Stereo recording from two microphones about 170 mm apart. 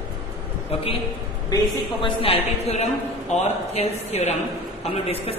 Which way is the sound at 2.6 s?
40° left (ahead or behind).